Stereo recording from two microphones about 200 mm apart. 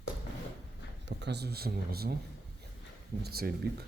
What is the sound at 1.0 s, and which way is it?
Speech, 60° right (ahead or behind).